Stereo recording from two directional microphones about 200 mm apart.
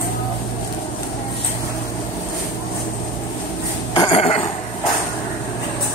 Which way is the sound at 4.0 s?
25° left (ahead or behind).